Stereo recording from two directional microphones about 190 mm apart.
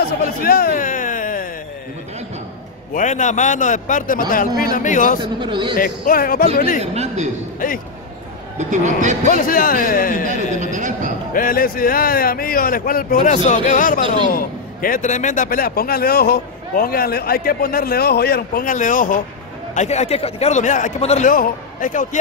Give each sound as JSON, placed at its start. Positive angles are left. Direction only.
{"t": 0.0, "sound": "a sound", "side_deg": 50}
{"t": 2.9, "sound": "a man's voice", "side_deg": 40}
{"t": 5.2, "sound": "a man's voice", "side_deg": -25}
{"t": 5.8, "sound": "a man's voice", "side_deg": 50}
{"t": 6.8, "sound": "speech", "side_deg": -35}
{"t": 7.6, "sound": "a man's voice", "side_deg": 45}
{"t": 8.5, "sound": "speech", "side_deg": -40}
{"t": 9.3, "sound": "a man's voice", "side_deg": 45}
{"t": 10.2, "sound": "a man's voice", "side_deg": -40}
{"t": 11.3, "sound": "a man's voice", "side_deg": 50}